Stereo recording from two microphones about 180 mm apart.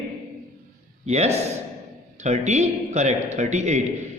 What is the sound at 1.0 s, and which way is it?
A man's voice, 35° right (ahead or behind).